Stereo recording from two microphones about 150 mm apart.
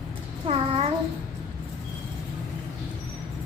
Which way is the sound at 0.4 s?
35° right (ahead or behind).